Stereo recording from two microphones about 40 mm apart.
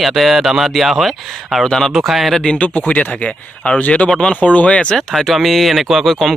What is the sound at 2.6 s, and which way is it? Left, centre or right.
Speech, left.